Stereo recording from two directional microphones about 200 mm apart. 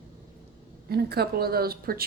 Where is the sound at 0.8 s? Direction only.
50° right (ahead or behind).